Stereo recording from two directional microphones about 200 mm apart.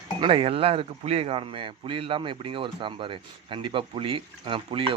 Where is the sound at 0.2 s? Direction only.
25° right (ahead or behind).